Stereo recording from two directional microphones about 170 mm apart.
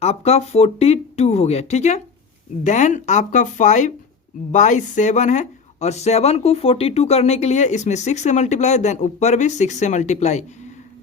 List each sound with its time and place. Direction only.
0.0 s speech: 40° left (ahead or behind)